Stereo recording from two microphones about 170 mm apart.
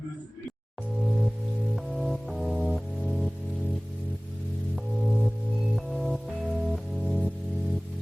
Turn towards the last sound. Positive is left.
turn(degrees=0)  # may be behind; listen again after turning